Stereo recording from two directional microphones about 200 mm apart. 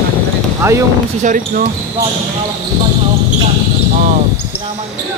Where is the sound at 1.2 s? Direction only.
40° right (ahead or behind).